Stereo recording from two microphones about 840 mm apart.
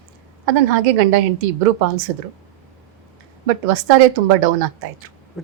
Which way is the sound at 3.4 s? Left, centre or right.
Right.